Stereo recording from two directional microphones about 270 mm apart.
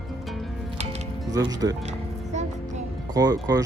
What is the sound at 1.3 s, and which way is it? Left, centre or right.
Speech, centre.